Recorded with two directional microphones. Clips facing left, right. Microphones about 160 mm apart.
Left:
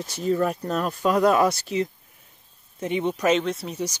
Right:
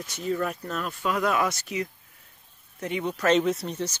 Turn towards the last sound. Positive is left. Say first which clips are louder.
# even
turn(degrees=0)  # may be behind; listen again after turning